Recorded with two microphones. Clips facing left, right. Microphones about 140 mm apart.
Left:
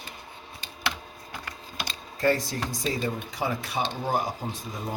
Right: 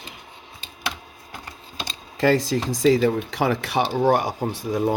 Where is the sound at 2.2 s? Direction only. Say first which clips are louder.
Right 6 dB; 90° right; by 4.9 s 75° right (ahead or behind).